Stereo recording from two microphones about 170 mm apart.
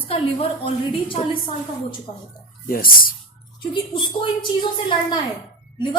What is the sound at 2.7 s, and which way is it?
Speech, 55° left (ahead or behind).